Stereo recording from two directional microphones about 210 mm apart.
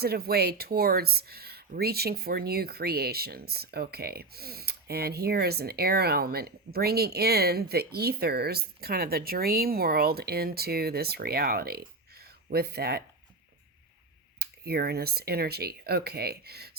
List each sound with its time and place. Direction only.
0.0 s speech: 50° right (ahead or behind)
14.3 s speech: 50° right (ahead or behind)